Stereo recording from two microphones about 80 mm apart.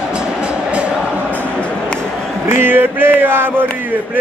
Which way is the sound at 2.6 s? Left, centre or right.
Right.